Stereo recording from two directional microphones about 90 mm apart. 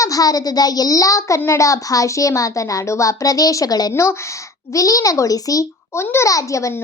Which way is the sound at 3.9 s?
30° left (ahead or behind).